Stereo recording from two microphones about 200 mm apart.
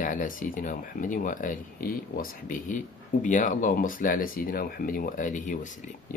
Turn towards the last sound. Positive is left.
turn(degrees=40)  # may be behind; listen again after turning